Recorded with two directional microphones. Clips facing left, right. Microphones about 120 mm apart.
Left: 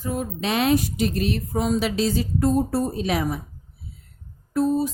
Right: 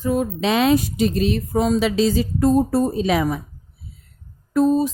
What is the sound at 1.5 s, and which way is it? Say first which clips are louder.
Speech: right 5 dB; 90° right.